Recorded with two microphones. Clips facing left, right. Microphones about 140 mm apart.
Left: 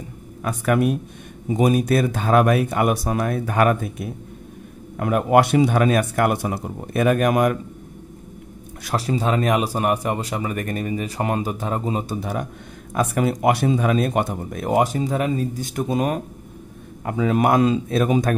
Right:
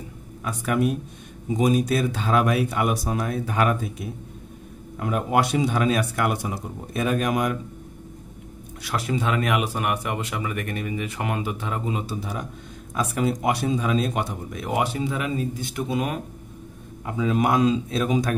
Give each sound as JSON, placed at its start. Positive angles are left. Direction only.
{"t": 0.4, "sound": "speech", "side_deg": 55}
{"t": 8.8, "sound": "speech", "side_deg": 35}
{"t": 12.2, "sound": "speech", "side_deg": 55}
{"t": 17.0, "sound": "speech", "side_deg": 55}